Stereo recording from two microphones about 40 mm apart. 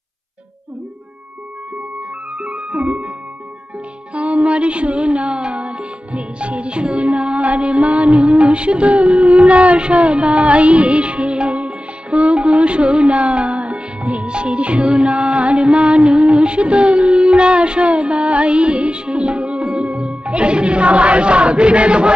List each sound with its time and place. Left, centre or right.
2.3 s music: right
4.1 s music: right